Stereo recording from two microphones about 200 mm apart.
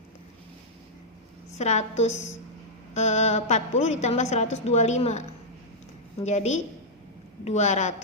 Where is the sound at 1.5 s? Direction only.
35° left (ahead or behind).